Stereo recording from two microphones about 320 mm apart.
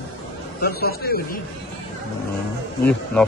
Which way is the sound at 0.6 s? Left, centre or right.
Left.